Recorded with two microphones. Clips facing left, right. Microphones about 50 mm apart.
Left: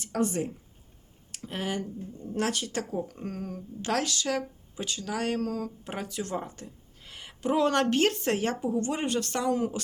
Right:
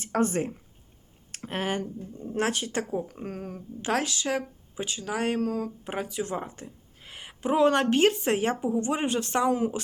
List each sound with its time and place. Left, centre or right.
0.0 s speech: right
2.3 s speech: right